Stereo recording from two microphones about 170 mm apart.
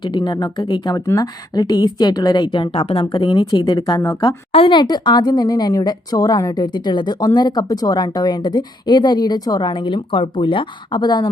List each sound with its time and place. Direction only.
0.0 s a woman's voice: 25° left (ahead or behind)